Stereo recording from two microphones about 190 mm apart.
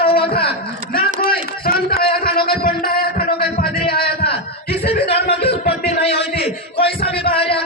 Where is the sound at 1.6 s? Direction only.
55° left (ahead or behind).